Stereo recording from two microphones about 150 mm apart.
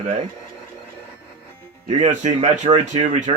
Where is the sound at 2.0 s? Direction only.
50° right (ahead or behind).